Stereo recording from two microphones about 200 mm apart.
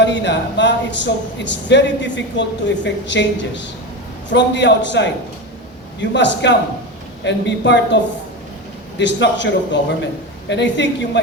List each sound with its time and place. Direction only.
0.0 s speech: 60° left (ahead or behind)
9.0 s speech: 60° left (ahead or behind)
10.5 s speech: 60° left (ahead or behind)